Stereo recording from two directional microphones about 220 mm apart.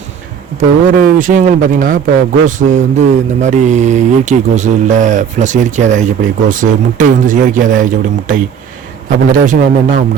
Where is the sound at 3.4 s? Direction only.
35° right (ahead or behind).